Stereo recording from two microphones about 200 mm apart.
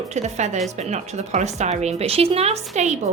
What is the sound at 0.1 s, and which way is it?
Speech, 35° right (ahead or behind).